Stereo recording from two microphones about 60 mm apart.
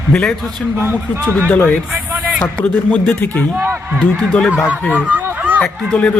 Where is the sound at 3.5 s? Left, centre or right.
Right.